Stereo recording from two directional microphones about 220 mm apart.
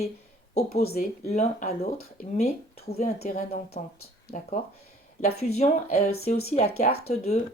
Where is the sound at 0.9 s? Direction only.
30° left (ahead or behind).